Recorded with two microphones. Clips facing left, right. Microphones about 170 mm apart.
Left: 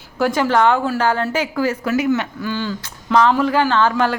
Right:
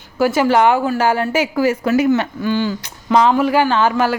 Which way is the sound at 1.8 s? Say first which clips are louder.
Right 3 dB; 30° right (ahead or behind).